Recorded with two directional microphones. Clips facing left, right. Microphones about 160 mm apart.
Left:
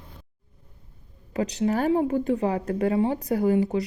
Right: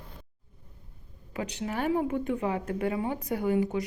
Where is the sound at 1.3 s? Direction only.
35° left (ahead or behind).